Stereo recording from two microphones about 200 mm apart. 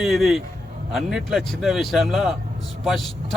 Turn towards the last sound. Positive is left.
turn(degrees=0)  # may be behind; listen again after turning